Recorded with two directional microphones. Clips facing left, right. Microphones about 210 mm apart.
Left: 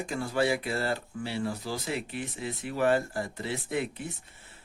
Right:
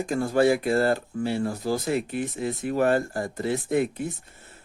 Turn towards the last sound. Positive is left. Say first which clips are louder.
# right 7 dB
turn(degrees=-45)  # may be behind; listen again after turning